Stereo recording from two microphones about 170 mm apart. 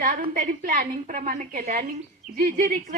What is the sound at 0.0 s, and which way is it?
A woman's voice, 55° right (ahead or behind).